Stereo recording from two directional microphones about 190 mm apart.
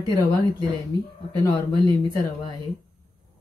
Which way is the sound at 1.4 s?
20° left (ahead or behind).